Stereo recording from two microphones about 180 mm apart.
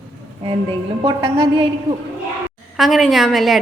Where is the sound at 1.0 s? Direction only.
30° right (ahead or behind).